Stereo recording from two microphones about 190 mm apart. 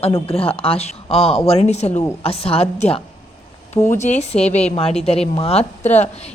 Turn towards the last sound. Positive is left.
turn(degrees=35)  # may be behind; listen again after turning